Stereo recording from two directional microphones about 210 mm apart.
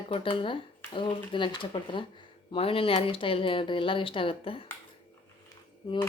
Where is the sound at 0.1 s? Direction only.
25° left (ahead or behind).